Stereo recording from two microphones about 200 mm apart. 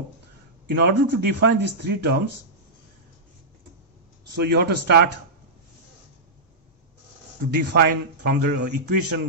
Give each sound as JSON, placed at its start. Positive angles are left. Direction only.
{"t": 0.7, "sound": "speech", "side_deg": -55}
{"t": 4.3, "sound": "speech", "side_deg": -50}
{"t": 7.5, "sound": "speech", "side_deg": -50}
{"t": 8.4, "sound": "speech", "side_deg": -40}